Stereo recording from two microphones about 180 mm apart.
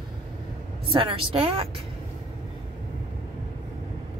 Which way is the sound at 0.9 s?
30° right (ahead or behind).